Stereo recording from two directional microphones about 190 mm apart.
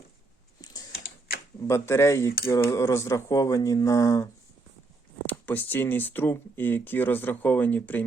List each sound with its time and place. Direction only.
0.6 s typing: 20° left (ahead or behind)
1.6 s speech: 15° left (ahead or behind)